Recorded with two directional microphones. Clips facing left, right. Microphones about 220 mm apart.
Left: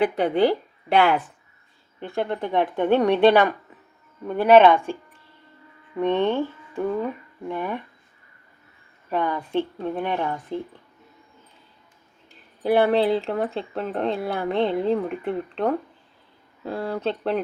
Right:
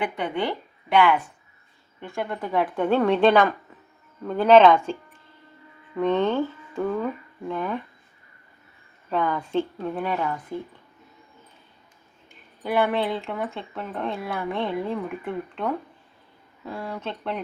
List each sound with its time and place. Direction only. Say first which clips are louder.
0.2 s speech: left 8 dB; 35° left (ahead or behind)
2.0 s speech: left 4 dB; 30° left (ahead or behind); by 4.8 s 15° left (ahead or behind)
6.0 s speech: even; 15° left (ahead or behind)
9.0 s speech: even; 15° left (ahead or behind)
12.6 s speech: left 5 dB; 35° left (ahead or behind)